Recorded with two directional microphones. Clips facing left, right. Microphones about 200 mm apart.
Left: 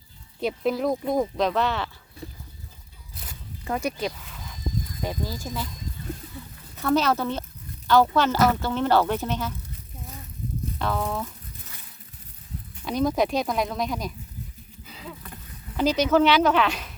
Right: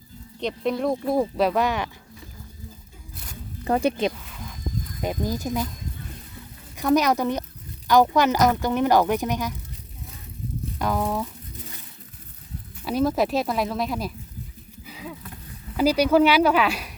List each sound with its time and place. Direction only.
0.3 s speech: 5° left (ahead or behind); by 1.9 s 15° right (ahead or behind)
3.6 s speech: 35° right (ahead or behind); by 5.5 s 15° right (ahead or behind)
6.7 s speech: 15° right (ahead or behind)
10.8 s speech: 10° right (ahead or behind)
12.8 s speech: 5° right (ahead or behind)
14.8 s a sound: 10° right (ahead or behind)
15.8 s speech: 10° right (ahead or behind)